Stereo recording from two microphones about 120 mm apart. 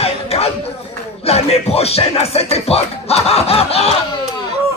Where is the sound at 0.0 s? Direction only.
60° left (ahead or behind).